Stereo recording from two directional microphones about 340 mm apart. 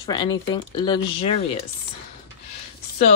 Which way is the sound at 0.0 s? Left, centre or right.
Centre.